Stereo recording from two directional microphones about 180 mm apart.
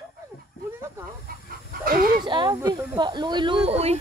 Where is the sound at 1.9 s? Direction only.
55° right (ahead or behind).